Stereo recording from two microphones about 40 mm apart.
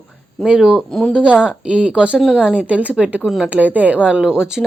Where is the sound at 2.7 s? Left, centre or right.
Right.